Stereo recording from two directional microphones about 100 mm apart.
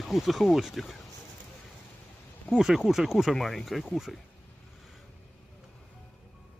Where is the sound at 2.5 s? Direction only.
5° right (ahead or behind).